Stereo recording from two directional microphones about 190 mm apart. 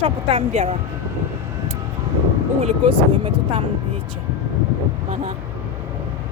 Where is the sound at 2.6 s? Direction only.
35° right (ahead or behind).